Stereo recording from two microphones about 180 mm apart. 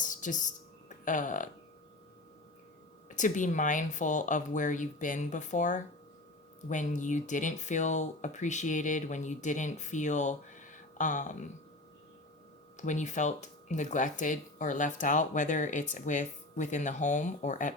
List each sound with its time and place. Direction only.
0.0 s a sound: 45° left (ahead or behind)
3.2 s speech: 45° left (ahead or behind)
12.7 s speech: 45° left (ahead or behind)